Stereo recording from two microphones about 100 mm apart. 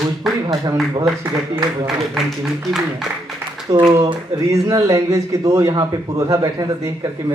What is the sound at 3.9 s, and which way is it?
A man's voice, 35° right (ahead or behind).